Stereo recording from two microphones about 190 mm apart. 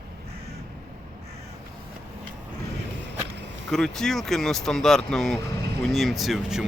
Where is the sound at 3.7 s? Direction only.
Centre (ahead or behind).